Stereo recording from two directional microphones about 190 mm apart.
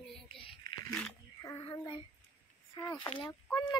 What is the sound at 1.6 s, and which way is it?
Child singing, 30° left (ahead or behind).